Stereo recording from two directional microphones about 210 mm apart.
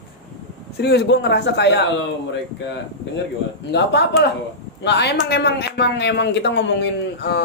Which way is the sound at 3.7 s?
55° left (ahead or behind).